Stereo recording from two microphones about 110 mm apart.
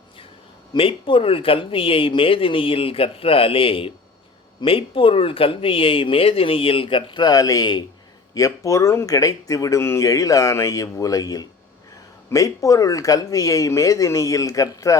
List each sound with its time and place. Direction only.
0.7 s speech: 55° left (ahead or behind); by 14.9 s 30° left (ahead or behind)